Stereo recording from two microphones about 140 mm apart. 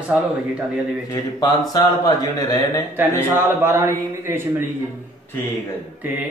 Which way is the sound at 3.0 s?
15° right (ahead or behind).